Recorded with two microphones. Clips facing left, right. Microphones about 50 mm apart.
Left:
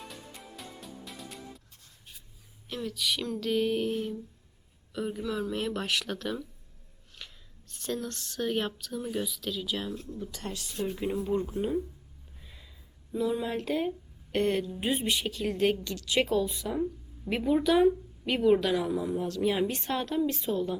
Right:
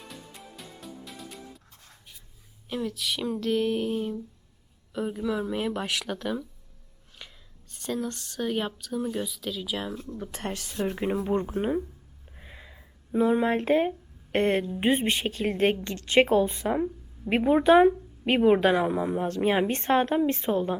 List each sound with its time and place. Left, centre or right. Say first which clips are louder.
0.0 s music: right 1 dB; centre
2.6 s speech: right 2 dB; centre
7.7 s speech: right 3 dB; centre
10.2 s a woman's voice: right 4 dB; right
12.4 s a sound: right 7 dB; right
14.3 s a woman's voice: right 3 dB; right